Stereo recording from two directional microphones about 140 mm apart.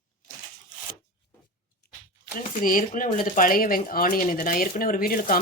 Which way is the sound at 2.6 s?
75° left (ahead or behind).